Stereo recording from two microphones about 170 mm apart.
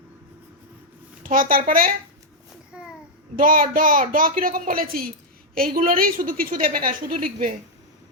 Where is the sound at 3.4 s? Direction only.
55° right (ahead or behind).